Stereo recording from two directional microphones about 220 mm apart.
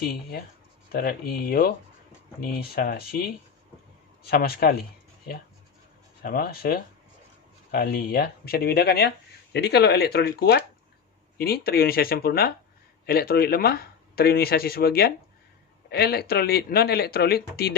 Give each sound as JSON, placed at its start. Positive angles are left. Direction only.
{"t": 0.1, "sound": "speech", "side_deg": 45}
{"t": 6.2, "sound": "speech", "side_deg": 40}